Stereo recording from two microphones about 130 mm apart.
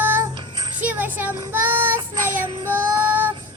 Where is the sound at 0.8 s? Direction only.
15° right (ahead or behind).